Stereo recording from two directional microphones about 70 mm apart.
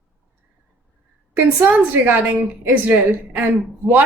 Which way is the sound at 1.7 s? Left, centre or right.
Right.